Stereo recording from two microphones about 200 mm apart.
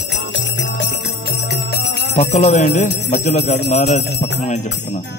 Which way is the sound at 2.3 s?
35° left (ahead or behind).